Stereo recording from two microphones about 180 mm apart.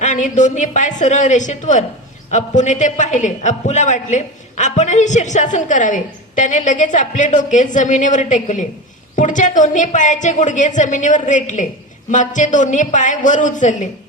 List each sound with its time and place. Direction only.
0.0 s a man's voice: 40° left (ahead or behind)